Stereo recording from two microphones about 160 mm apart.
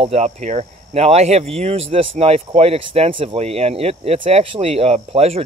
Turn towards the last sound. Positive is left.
turn(degrees=-40)  # may be behind; listen again after turning